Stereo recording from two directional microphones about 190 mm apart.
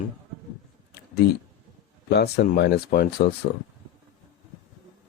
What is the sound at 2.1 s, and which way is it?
Speech, 60° left (ahead or behind).